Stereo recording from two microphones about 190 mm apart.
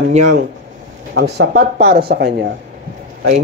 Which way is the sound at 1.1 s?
60° right (ahead or behind).